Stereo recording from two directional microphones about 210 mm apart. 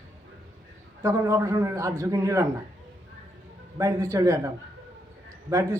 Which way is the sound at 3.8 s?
15° right (ahead or behind).